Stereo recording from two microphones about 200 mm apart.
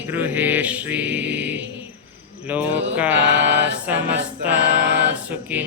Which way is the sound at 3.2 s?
60° right (ahead or behind).